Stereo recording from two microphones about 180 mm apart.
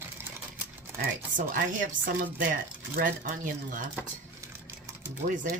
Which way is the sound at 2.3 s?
50° right (ahead or behind).